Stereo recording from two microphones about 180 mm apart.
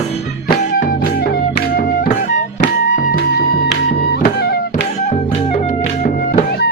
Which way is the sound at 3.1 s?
60° left (ahead or behind).